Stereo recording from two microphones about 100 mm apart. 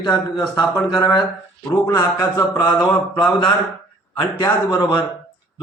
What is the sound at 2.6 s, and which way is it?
Mantra, 45° left (ahead or behind).